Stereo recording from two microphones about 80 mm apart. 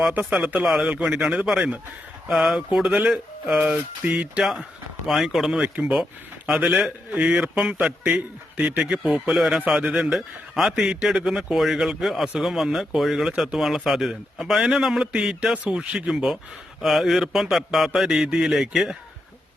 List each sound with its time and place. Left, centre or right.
0.1 s a man's voice: centre
5.0 s a man's voice: centre
7.1 s a man's voice: centre
7.3 s a man's voice: centre
9.0 s a man's voice: centre